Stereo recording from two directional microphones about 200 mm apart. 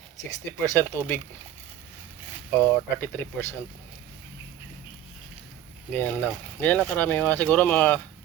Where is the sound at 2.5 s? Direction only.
10° left (ahead or behind).